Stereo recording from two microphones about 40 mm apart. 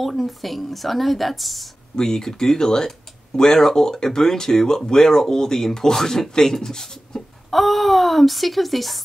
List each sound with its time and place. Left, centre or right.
0.0 s speech: centre
2.0 s speech: centre
7.5 s speech: centre